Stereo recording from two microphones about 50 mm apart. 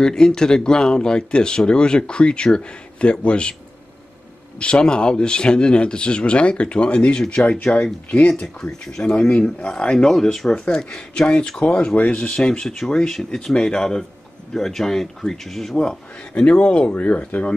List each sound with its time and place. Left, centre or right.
0.0 s speech: centre
4.6 s speech: left
10.5 s speech: centre
12.3 s speech: centre
15.8 s speech: centre